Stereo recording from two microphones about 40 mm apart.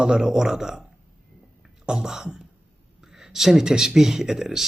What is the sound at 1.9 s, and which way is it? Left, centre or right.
Speech, centre.